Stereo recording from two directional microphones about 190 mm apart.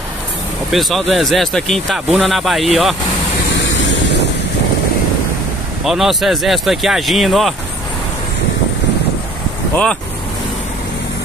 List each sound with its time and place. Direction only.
0.7 s speech: centre (ahead or behind)
3.7 s vehicle: 65° left (ahead or behind)
5.9 s speech: centre (ahead or behind)